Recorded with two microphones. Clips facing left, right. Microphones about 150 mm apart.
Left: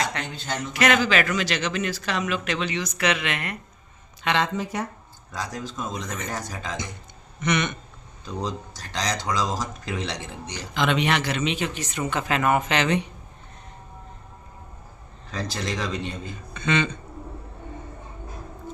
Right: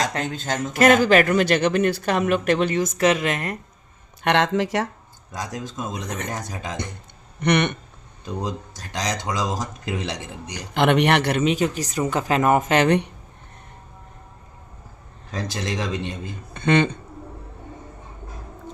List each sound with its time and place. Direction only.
0.0 s speech: 40° right (ahead or behind)
4.2 s speech: 60° right (ahead or behind); by 4.9 s 90° right
5.3 s speech: 20° right (ahead or behind)
7.4 s speech: 65° right (ahead or behind)
8.2 s speech: 20° right (ahead or behind)
10.8 s speech: 60° right (ahead or behind)
15.3 s speech: 20° right (ahead or behind)
16.6 s speech: 55° right (ahead or behind)